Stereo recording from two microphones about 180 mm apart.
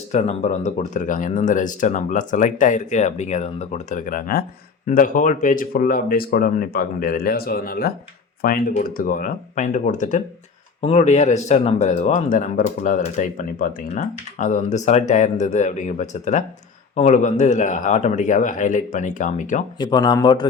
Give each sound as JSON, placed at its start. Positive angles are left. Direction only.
{"t": 0.1, "sound": "speech", "side_deg": 40}
{"t": 19.8, "sound": "speech", "side_deg": 25}